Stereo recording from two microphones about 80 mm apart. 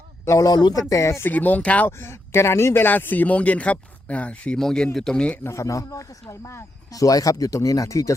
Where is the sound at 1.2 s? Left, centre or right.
Left.